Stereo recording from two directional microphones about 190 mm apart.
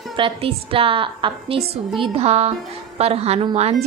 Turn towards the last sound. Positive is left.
turn(degrees=-30)  # may be behind; listen again after turning